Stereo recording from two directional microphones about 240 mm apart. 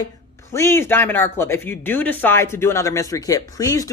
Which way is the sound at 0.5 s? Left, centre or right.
Centre.